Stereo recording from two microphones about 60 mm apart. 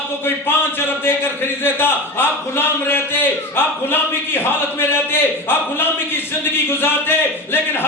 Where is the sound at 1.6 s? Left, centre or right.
Left.